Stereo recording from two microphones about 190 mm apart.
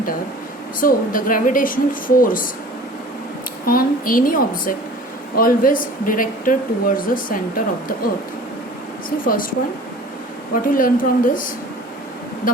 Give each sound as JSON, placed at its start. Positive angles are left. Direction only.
{"t": 0.8, "sound": "speech", "side_deg": 45}
{"t": 3.7, "sound": "speech", "side_deg": 50}
{"t": 9.0, "sound": "speech", "side_deg": 50}
{"t": 10.5, "sound": "speech", "side_deg": 45}